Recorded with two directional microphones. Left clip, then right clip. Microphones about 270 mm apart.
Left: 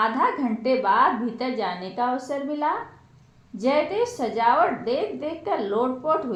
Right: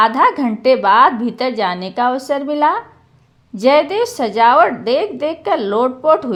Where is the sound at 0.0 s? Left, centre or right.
Right.